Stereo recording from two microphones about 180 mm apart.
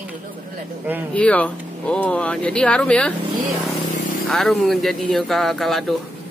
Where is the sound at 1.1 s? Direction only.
5° left (ahead or behind).